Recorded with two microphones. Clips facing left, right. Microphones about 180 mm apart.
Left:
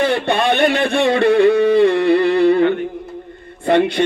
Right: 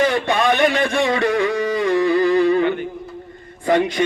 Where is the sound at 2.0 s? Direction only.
65° left (ahead or behind).